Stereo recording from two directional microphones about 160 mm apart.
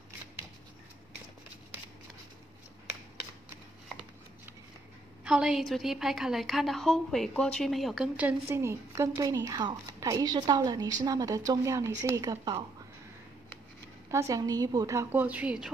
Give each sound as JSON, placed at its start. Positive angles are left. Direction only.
{"t": 5.2, "sound": "a woman's voice", "side_deg": -5}
{"t": 14.1, "sound": "a woman's voice", "side_deg": -20}